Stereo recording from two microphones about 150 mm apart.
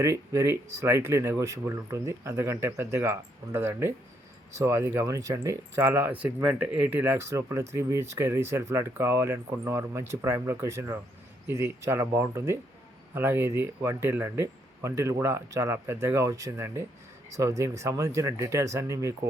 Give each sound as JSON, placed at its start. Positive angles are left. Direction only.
{"t": 0.0, "sound": "speech", "side_deg": -20}